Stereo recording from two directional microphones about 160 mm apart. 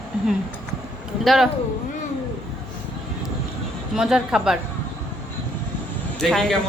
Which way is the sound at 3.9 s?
5° right (ahead or behind).